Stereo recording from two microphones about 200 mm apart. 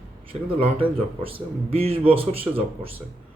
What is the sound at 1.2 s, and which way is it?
Speech, 30° right (ahead or behind).